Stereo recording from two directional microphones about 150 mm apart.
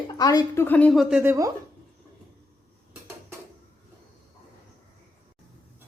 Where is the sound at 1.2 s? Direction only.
20° right (ahead or behind).